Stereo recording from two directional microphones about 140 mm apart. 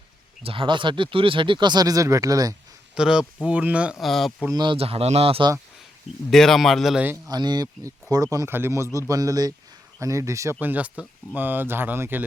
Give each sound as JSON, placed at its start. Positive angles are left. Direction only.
{"t": 0.4, "sound": "speech", "side_deg": -40}
{"t": 2.9, "sound": "speech", "side_deg": -5}
{"t": 4.5, "sound": "speech", "side_deg": -35}
{"t": 6.3, "sound": "speech", "side_deg": 0}
{"t": 7.3, "sound": "speech", "side_deg": -30}